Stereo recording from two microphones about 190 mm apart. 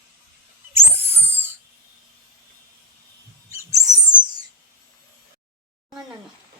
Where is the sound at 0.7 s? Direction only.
10° right (ahead or behind).